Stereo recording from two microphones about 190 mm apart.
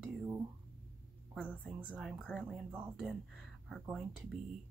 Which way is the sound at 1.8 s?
5° right (ahead or behind).